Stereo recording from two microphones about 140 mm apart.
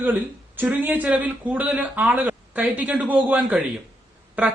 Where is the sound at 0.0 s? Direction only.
15° right (ahead or behind).